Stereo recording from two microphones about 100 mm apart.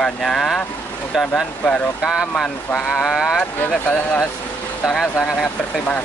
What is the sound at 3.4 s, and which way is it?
Speech, 15° left (ahead or behind).